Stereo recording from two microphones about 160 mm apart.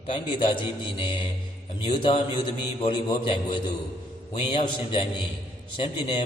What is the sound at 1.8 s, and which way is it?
A man's voice, 30° left (ahead or behind).